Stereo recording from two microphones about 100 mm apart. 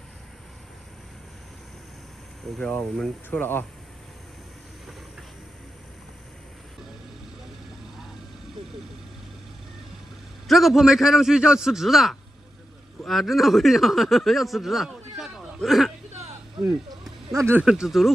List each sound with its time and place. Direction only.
2.6 s speech: 10° left (ahead or behind)
3.3 s speech: 20° left (ahead or behind)
10.5 s a man's voice: centre (ahead or behind)
16.9 s a sound: 35° right (ahead or behind)
17.6 s a man's voice: 5° right (ahead or behind)